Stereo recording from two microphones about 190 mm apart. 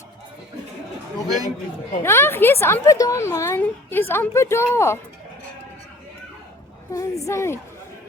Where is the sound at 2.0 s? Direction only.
15° left (ahead or behind).